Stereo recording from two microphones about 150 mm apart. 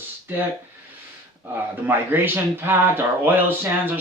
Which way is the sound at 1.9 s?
15° right (ahead or behind).